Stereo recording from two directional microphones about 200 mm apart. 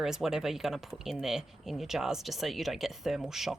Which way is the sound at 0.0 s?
Centre (ahead or behind).